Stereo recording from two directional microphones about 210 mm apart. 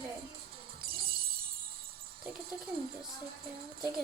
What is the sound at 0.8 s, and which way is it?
Shatter, 45° right (ahead or behind).